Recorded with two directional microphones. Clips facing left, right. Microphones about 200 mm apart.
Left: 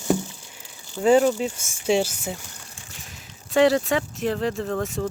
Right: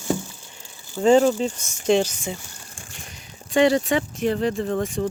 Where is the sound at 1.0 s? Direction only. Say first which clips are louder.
Right 1 dB; 5° left (ahead or behind).